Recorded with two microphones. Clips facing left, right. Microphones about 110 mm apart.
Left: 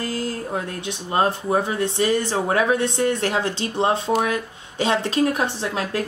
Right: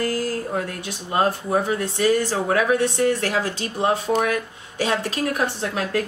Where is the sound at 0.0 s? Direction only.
25° left (ahead or behind).